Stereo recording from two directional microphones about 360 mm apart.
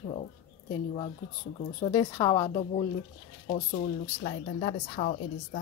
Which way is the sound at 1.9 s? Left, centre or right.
Centre.